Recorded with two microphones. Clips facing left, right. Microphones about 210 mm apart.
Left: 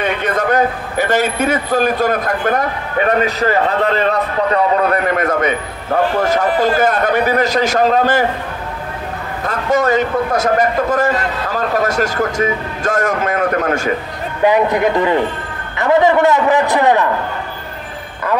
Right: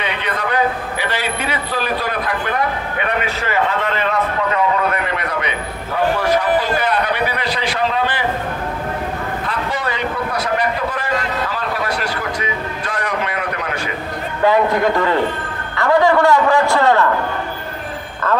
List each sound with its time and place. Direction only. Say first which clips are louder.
0.0 s a man's voice: left 6 dB; 45° left (ahead or behind)
9.4 s a man's voice: left 7 dB; 45° left (ahead or behind)
14.4 s a man's voice: left 2 dB; 20° left (ahead or behind)